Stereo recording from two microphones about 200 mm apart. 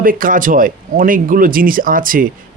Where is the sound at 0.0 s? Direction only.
45° right (ahead or behind).